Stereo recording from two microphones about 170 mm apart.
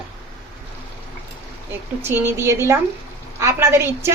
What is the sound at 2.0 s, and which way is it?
A woman's voice, 15° right (ahead or behind).